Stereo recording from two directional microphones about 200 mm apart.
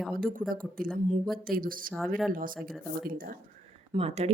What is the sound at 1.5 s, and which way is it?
A woman's voice, 45° right (ahead or behind).